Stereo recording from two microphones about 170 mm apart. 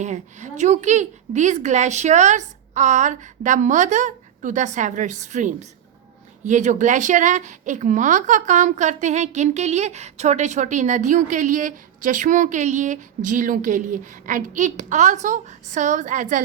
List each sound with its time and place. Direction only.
0.0 s a woman's voice: 45° right (ahead or behind)